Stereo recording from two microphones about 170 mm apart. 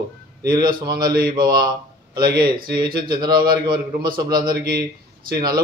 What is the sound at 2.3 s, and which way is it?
Speech, 65° right (ahead or behind).